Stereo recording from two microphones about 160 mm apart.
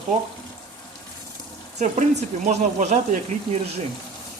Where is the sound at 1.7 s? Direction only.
50° right (ahead or behind).